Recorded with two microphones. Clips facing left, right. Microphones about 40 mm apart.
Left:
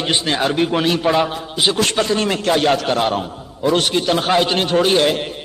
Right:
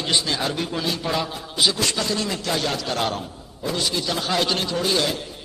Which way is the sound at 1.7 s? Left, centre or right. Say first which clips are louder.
Left 7 dB; left.